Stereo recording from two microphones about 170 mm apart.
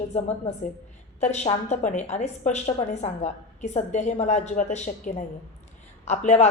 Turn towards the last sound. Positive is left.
turn(degrees=40)  # may be behind; listen again after turning